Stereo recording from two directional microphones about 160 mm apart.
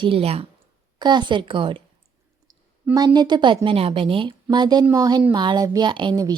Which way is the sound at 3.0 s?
25° right (ahead or behind).